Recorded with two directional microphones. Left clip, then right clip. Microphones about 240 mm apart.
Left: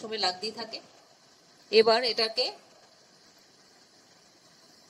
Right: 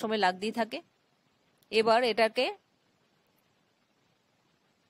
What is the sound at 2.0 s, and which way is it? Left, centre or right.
Speech, right.